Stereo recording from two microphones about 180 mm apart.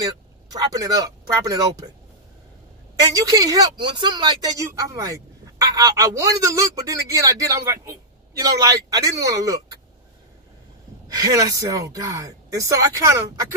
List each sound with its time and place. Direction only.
0.0 s speech: 20° right (ahead or behind)
3.2 s speech: 20° right (ahead or behind)
11.1 s speech: 20° right (ahead or behind)